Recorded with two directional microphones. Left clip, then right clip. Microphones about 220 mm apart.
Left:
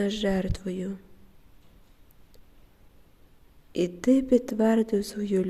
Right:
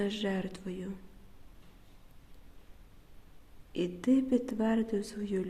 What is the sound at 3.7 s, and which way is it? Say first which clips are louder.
Speech: left 6 dB; 25° left (ahead or behind).